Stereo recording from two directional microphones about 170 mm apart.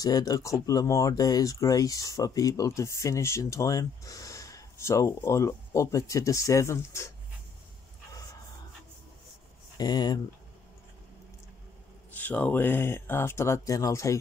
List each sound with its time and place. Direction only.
0.0 s speech: 20° left (ahead or behind)
9.8 s speech: 25° left (ahead or behind)
12.1 s speech: 10° left (ahead or behind)